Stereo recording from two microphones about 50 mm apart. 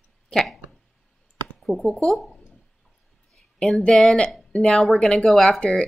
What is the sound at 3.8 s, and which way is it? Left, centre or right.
Speech, centre.